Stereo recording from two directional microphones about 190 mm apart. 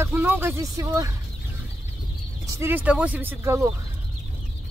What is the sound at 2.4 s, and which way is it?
Speech, 10° right (ahead or behind).